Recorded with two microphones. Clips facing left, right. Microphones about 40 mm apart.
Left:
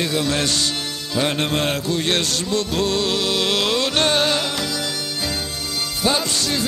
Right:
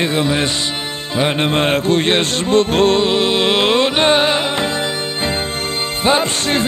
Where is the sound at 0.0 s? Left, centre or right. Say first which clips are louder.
Right 4 dB; right.